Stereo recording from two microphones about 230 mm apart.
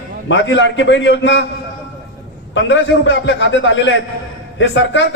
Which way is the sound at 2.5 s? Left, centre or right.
Left.